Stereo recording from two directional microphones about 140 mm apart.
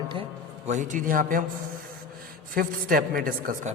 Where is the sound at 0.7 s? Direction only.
65° right (ahead or behind).